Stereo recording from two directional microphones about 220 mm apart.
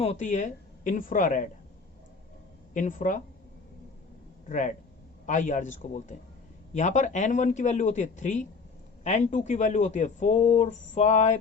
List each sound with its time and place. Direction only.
0.0 s speech: 30° left (ahead or behind)
2.7 s speech: 35° left (ahead or behind)
4.4 s speech: 35° left (ahead or behind)